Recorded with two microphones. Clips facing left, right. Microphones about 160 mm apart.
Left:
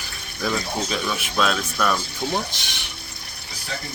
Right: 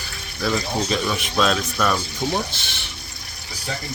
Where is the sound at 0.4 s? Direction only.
15° left (ahead or behind).